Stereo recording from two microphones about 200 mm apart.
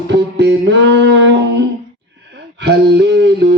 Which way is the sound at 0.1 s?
60° right (ahead or behind).